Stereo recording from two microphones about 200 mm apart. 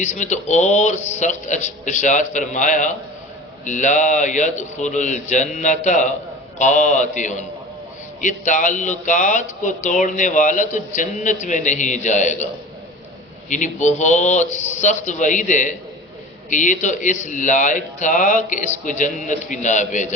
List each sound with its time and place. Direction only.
0.0 s speech: 35° left (ahead or behind)
13.5 s speech: 40° left (ahead or behind)